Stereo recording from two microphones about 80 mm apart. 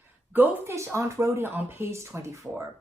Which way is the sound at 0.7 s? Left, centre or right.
Right.